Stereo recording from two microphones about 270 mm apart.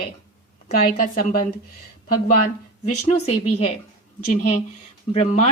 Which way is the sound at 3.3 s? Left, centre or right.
Left.